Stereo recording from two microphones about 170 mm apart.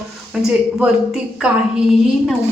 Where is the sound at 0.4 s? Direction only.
5° right (ahead or behind).